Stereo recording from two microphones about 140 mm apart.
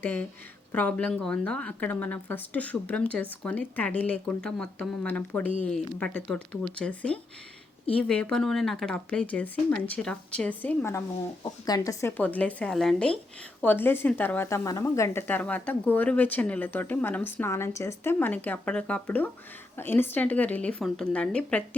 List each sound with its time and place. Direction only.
0.7 s speech: 10° left (ahead or behind)
11.4 s speech: 30° left (ahead or behind); by 21.8 s 10° left (ahead or behind)